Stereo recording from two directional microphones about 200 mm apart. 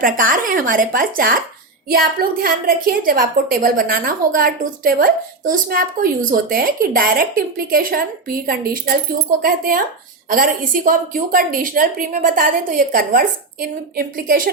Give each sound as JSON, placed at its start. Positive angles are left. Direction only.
{"t": 0.0, "sound": "a woman's voice", "side_deg": -45}
{"t": 9.4, "sound": "a woman's voice", "side_deg": -45}